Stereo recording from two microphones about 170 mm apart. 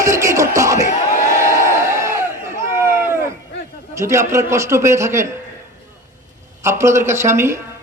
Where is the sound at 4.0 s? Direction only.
15° right (ahead or behind).